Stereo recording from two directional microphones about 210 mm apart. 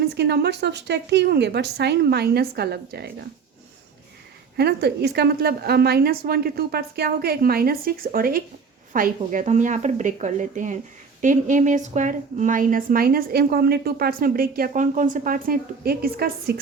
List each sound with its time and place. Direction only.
0.0 s a woman's voice: 50° right (ahead or behind)
4.5 s a woman's voice: 50° right (ahead or behind)